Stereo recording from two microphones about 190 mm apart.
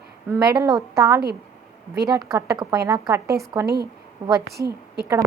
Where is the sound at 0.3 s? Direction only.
15° right (ahead or behind).